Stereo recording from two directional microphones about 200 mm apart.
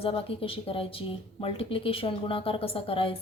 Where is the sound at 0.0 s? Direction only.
30° left (ahead or behind).